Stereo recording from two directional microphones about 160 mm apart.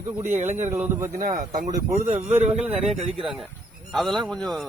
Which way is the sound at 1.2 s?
60° right (ahead or behind).